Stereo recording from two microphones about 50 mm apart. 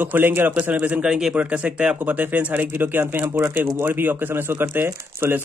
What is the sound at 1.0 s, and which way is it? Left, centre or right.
Speech, centre.